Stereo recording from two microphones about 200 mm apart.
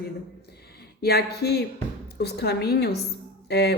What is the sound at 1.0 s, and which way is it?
A woman's voice, 50° left (ahead or behind).